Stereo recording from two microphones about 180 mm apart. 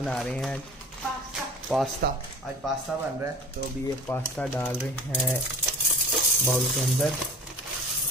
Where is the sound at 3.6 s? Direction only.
65° right (ahead or behind).